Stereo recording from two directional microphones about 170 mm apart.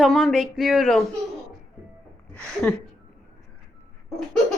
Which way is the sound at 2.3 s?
5° left (ahead or behind).